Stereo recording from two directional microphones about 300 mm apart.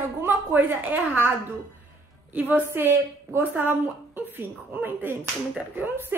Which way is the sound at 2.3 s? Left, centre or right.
Centre.